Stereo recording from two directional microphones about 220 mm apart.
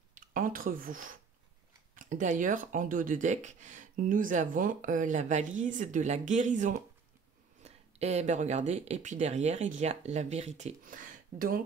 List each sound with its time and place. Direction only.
0.1 s speech: 40° right (ahead or behind)